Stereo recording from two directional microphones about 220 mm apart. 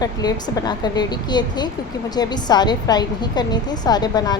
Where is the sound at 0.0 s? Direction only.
15° left (ahead or behind).